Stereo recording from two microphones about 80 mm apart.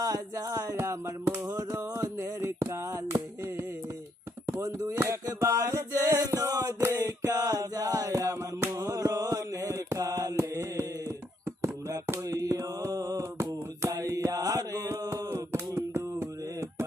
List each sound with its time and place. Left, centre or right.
0.0 s speech: right
1.5 s music: right
4.6 s music: right
8.7 s mantra: right
11.9 s mantra: right